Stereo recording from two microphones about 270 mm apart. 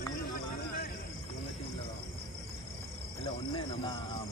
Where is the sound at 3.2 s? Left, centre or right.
Centre.